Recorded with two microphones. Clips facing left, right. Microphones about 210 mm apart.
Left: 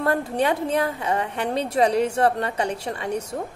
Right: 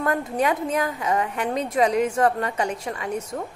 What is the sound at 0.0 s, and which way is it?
A woman's voice, 30° left (ahead or behind).